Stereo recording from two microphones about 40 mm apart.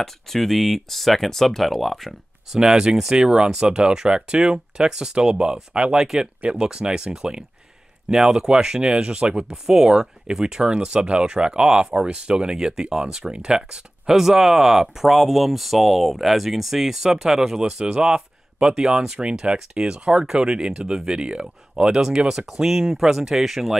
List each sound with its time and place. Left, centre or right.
0.0 s speech: centre
2.5 s speech: centre
9.5 s speech: centre
21.2 s speech: right
22.5 s speech: centre